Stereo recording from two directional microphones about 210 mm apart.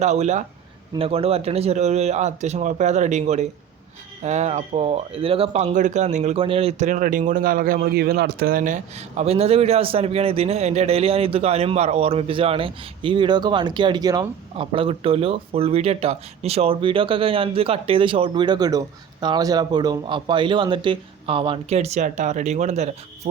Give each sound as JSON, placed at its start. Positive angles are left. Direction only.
{"t": 0.0, "sound": "speech", "side_deg": -35}